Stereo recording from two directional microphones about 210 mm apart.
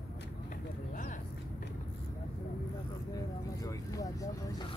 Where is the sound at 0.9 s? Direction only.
40° left (ahead or behind).